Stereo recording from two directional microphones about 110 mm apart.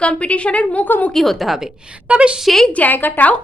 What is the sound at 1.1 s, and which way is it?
A woman's voice, centre (ahead or behind).